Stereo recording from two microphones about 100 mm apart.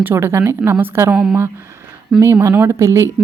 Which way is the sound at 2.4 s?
30° right (ahead or behind).